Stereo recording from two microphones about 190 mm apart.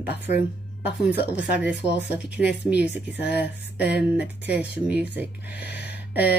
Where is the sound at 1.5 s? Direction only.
5° right (ahead or behind).